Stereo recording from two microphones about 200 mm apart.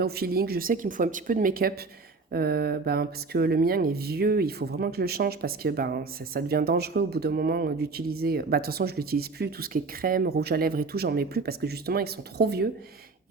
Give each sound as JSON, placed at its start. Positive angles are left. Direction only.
{"t": 0.0, "sound": "speech", "side_deg": -50}